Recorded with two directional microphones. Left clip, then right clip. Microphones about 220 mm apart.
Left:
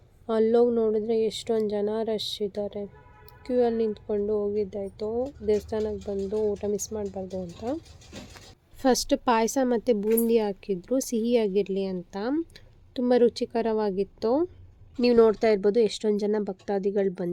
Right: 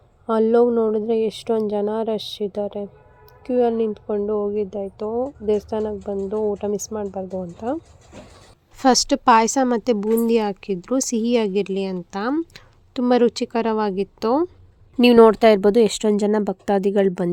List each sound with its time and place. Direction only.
0.3 s a woman's voice: 10° right (ahead or behind)
8.8 s a woman's voice: 15° right (ahead or behind)
15.0 s speech: 30° right (ahead or behind)